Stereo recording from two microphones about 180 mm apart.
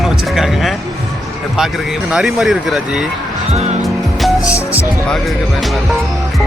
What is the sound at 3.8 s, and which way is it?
Music, centre (ahead or behind).